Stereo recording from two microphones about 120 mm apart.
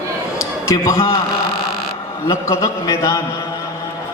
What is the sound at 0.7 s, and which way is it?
Speech, 25° left (ahead or behind).